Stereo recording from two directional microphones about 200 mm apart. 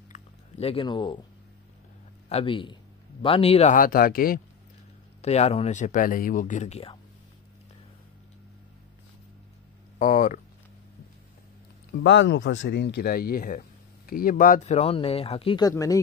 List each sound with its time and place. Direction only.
0.1 s biting: 30° left (ahead or behind)
2.2 s speech: 30° left (ahead or behind); by 4.4 s 45° left (ahead or behind)
5.2 s speech: 35° left (ahead or behind)
9.9 s speech: 40° left (ahead or behind)
12.0 s speech: 60° left (ahead or behind); by 16.0 s 15° left (ahead or behind)